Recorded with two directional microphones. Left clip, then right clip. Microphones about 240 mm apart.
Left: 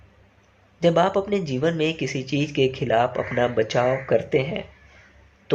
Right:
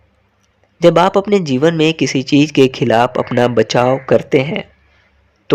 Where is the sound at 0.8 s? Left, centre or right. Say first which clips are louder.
Right 9 dB; right.